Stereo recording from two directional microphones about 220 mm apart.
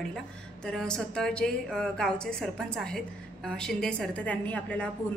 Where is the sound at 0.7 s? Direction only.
5° left (ahead or behind).